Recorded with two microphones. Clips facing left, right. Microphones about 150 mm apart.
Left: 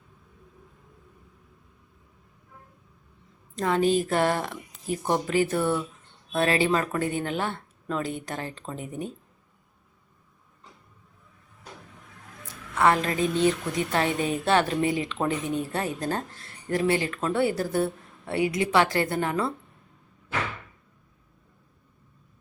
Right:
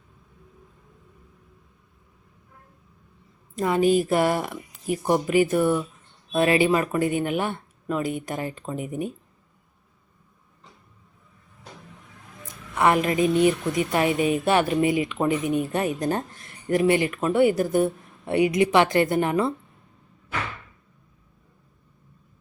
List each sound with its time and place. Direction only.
3.5 s a woman's voice: 10° right (ahead or behind)
12.7 s a woman's voice: 15° right (ahead or behind)